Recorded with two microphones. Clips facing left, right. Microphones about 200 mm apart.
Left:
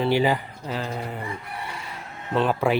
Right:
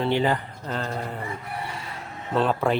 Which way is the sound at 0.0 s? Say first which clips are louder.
Left 2 dB; 10° left (ahead or behind).